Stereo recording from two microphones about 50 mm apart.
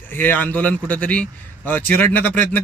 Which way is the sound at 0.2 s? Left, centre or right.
Left.